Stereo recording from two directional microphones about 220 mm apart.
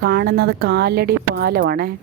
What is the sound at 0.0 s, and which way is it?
Speech, 45° right (ahead or behind).